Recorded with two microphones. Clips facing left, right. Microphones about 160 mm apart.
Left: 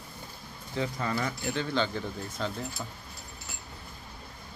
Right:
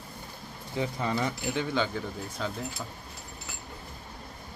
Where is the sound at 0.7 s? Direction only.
15° right (ahead or behind).